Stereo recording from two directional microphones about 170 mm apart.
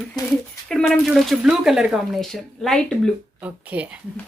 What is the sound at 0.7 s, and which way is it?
A woman's voice, 5° left (ahead or behind).